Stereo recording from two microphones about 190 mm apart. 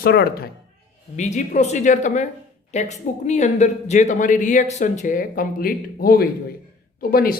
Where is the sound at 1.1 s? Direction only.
40° left (ahead or behind).